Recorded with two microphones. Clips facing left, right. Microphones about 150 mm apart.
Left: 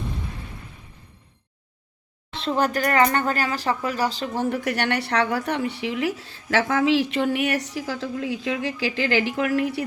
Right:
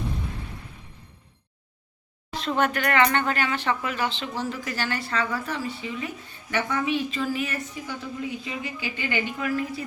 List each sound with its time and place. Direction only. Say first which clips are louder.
2.3 s speech: left 2 dB; 30° left (ahead or behind)
4.4 s a woman's voice: left 8 dB; 60° left (ahead or behind)